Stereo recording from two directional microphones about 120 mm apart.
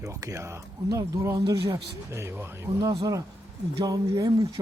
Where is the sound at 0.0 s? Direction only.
25° right (ahead or behind).